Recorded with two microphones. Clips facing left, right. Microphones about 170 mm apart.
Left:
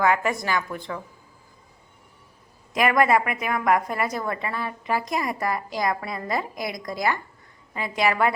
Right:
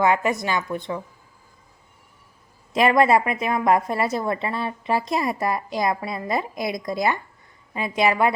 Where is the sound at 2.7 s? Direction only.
25° right (ahead or behind).